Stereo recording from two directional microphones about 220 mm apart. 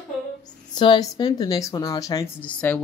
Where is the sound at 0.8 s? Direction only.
20° left (ahead or behind).